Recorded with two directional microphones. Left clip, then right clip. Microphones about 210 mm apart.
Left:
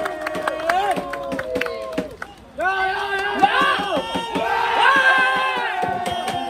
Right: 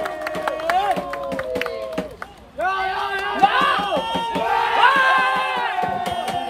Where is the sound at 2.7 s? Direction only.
50° right (ahead or behind).